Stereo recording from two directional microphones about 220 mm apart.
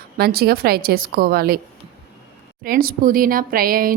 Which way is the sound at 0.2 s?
45° right (ahead or behind).